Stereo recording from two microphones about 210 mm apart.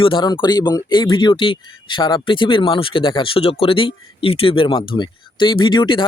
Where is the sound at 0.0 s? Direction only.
20° left (ahead or behind).